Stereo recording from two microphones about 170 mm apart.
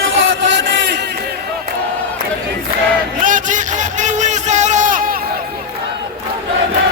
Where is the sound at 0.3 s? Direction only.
90° right.